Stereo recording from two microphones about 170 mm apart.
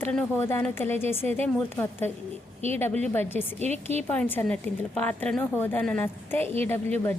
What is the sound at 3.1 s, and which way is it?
Speech, 10° left (ahead or behind).